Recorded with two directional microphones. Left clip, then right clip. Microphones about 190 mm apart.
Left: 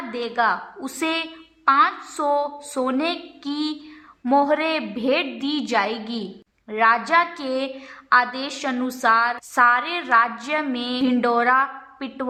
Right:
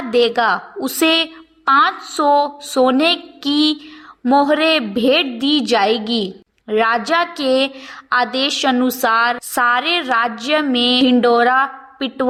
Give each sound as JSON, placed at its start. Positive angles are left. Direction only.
{"t": 0.1, "sound": "a woman's voice", "side_deg": -30}